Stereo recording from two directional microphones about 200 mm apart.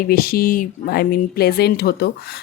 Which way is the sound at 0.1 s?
50° left (ahead or behind).